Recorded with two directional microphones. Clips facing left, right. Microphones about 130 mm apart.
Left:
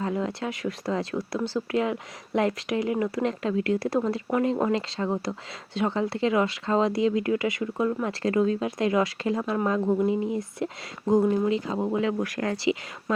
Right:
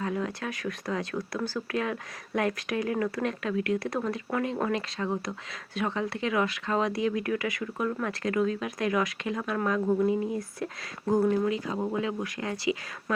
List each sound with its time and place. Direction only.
0.0 s speech: 25° left (ahead or behind)